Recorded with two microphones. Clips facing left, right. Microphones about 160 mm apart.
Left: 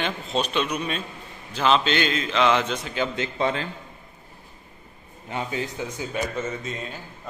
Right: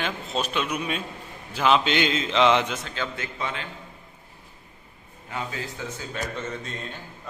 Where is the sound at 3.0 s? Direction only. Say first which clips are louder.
Left 6 dB; 15° left (ahead or behind).